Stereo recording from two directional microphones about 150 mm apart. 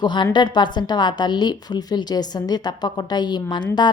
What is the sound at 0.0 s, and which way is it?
A woman's voice, 30° left (ahead or behind).